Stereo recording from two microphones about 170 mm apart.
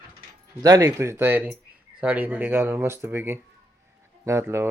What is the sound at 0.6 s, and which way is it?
Speech, 20° right (ahead or behind).